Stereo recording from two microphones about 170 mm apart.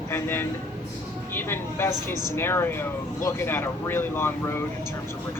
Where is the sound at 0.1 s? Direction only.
15° left (ahead or behind).